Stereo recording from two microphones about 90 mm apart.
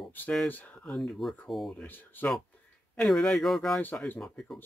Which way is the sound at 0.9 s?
5° left (ahead or behind).